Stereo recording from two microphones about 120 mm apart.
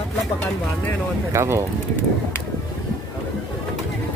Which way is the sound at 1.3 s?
20° right (ahead or behind).